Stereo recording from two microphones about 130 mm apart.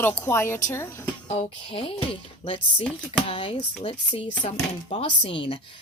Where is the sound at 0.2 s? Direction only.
20° left (ahead or behind).